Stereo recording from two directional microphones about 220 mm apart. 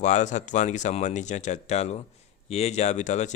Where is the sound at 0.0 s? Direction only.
30° left (ahead or behind).